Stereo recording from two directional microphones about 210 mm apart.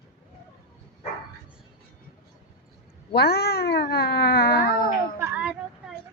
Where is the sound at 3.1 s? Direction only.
50° left (ahead or behind).